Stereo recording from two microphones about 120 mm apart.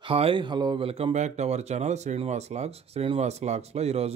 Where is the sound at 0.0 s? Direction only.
50° right (ahead or behind).